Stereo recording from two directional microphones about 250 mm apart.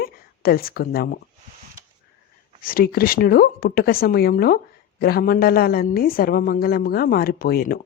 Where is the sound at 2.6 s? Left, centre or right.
Left.